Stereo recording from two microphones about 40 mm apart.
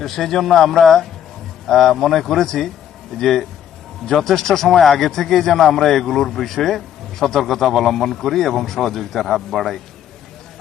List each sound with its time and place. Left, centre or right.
0.0 s a man's voice: centre